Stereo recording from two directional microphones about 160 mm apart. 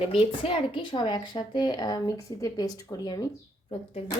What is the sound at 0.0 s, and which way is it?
Speech, 35° left (ahead or behind).